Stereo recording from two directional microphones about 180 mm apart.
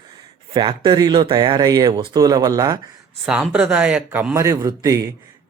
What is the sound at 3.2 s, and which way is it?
A man's voice, 5° right (ahead or behind).